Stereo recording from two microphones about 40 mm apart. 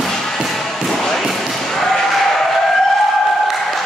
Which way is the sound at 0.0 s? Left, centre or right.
Centre.